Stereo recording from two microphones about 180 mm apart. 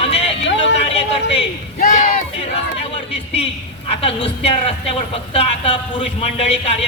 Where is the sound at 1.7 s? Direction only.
45° left (ahead or behind).